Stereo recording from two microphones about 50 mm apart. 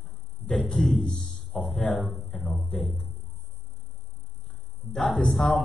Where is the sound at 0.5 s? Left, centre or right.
Centre.